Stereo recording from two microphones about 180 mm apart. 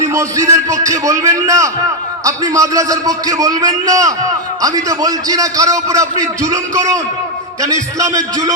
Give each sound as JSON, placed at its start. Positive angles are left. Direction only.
{"t": 0.0, "sound": "a man's voice", "side_deg": -15}